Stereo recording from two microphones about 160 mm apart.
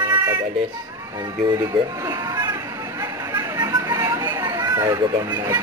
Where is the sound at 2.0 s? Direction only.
20° right (ahead or behind).